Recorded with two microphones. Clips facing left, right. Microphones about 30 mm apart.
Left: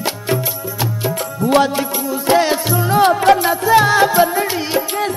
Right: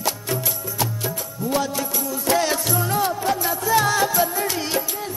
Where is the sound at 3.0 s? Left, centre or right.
Left.